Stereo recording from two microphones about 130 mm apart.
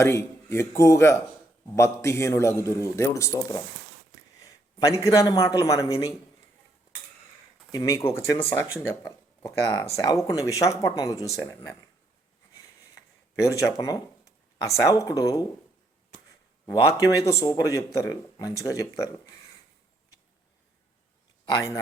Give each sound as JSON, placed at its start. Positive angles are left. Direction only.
{"t": 0.0, "sound": "a man's voice", "side_deg": 20}
{"t": 7.7, "sound": "a man's voice", "side_deg": 25}
{"t": 13.4, "sound": "a man's voice", "side_deg": 20}
{"t": 16.8, "sound": "a man's voice", "side_deg": 25}
{"t": 21.5, "sound": "a man's voice", "side_deg": 20}